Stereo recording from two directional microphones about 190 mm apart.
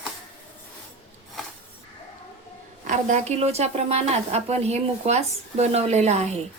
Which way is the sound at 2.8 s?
40° right (ahead or behind).